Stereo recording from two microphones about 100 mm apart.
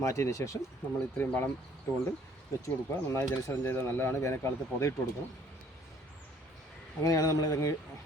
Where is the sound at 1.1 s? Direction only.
20° left (ahead or behind).